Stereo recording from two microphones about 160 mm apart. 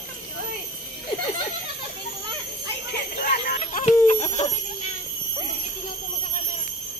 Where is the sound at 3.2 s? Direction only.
70° left (ahead or behind).